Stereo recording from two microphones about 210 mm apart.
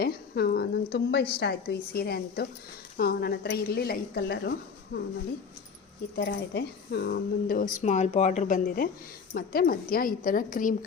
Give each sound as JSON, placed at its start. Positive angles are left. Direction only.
{"t": 0.0, "sound": "speech", "side_deg": 45}
{"t": 6.1, "sound": "speech", "side_deg": 50}